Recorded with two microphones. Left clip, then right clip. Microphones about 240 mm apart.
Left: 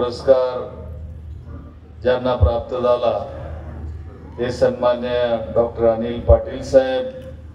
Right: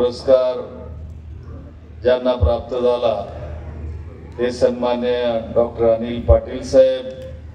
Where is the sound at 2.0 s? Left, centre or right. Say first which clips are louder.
Right 2 dB; left.